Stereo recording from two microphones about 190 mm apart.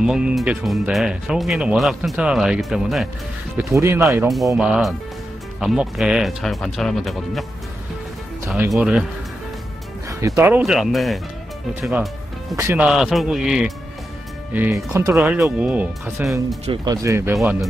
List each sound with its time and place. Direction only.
0.0 s speech: 5° right (ahead or behind)
3.5 s speech: 15° right (ahead or behind)
4.3 s speech: centre (ahead or behind)
8.7 s speech: 5° right (ahead or behind)
10.0 s speech: 15° right (ahead or behind)
10.6 s speech: centre (ahead or behind)
16.8 s speech: 15° right (ahead or behind)